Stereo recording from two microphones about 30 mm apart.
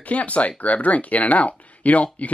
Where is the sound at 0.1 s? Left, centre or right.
Left.